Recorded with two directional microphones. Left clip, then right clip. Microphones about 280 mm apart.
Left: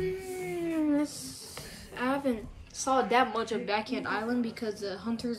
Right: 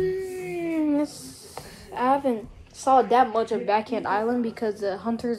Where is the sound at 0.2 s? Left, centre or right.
Centre.